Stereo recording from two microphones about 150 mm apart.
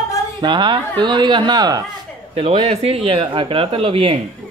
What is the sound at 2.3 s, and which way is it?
Speech, 40° right (ahead or behind).